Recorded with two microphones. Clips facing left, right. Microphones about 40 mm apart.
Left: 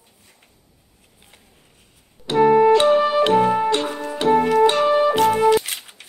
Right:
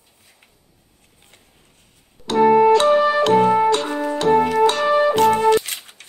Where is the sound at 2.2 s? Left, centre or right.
Centre.